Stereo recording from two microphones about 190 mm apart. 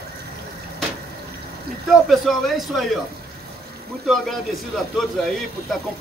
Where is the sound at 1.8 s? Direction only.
Centre (ahead or behind).